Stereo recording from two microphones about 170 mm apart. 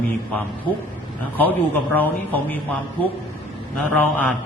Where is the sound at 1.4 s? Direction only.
10° left (ahead or behind).